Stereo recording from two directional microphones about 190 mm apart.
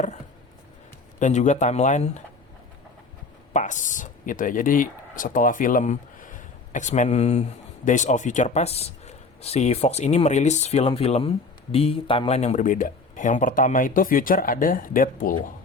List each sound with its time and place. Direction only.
1.2 s speech: 40° left (ahead or behind)
3.5 s speech: 40° left (ahead or behind)